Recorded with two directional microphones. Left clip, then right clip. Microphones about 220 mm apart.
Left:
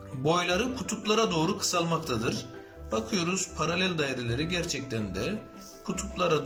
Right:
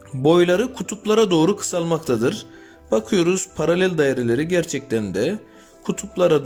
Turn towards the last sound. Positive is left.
turn(degrees=-35)  # may be behind; listen again after turning